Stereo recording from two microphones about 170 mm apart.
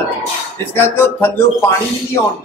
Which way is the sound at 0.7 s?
15° left (ahead or behind).